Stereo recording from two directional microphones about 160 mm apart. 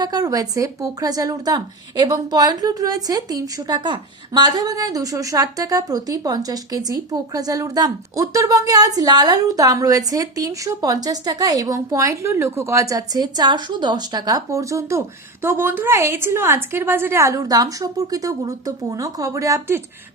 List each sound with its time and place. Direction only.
0.0 s a woman's voice: 25° right (ahead or behind)